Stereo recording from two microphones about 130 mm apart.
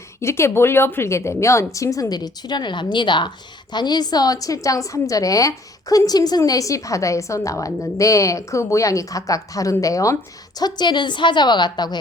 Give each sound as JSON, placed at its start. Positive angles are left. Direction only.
{"t": 0.2, "sound": "a woman's voice", "side_deg": 20}